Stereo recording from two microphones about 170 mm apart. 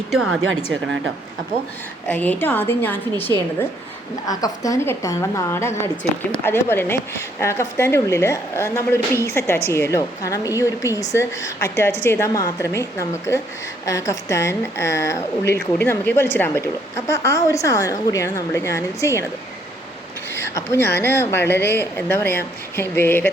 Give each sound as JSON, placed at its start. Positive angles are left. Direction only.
{"t": 2.0, "sound": "a woman's voice", "side_deg": 10}
{"t": 4.3, "sound": "a woman's voice", "side_deg": 20}
{"t": 20.3, "sound": "a woman's voice", "side_deg": 15}